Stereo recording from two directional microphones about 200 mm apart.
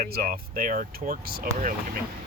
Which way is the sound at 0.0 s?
50° right (ahead or behind).